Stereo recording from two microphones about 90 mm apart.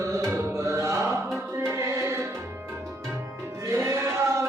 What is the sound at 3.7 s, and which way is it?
Music, 30° right (ahead or behind).